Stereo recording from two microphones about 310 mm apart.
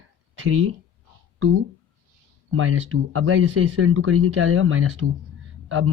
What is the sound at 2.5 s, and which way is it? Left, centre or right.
Speech, right.